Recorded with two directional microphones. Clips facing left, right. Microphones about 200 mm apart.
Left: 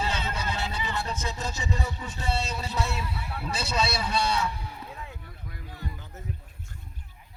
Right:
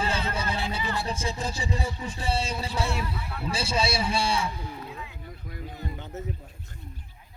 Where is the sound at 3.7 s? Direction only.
10° right (ahead or behind).